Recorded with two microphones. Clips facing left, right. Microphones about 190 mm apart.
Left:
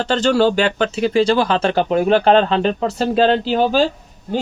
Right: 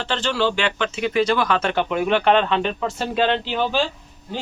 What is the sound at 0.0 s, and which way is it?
Speech, 40° left (ahead or behind).